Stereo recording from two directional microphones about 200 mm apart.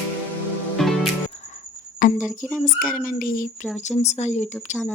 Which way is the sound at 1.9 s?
40° left (ahead or behind).